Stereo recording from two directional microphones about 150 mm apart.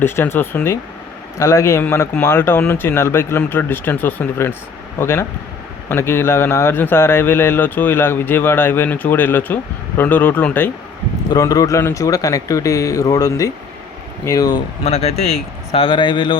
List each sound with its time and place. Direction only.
0.0 s speech: 15° left (ahead or behind)
11.3 s a man's voice: 25° left (ahead or behind)
14.8 s speech: 45° left (ahead or behind)